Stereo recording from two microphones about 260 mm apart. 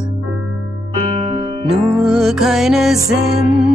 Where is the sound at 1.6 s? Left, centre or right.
Centre.